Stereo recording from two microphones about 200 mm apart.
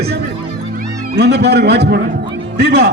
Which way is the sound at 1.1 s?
55° right (ahead or behind).